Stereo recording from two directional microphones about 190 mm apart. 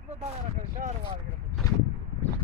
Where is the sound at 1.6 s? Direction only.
20° left (ahead or behind).